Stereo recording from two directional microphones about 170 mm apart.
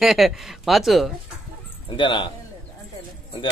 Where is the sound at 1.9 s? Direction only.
30° left (ahead or behind).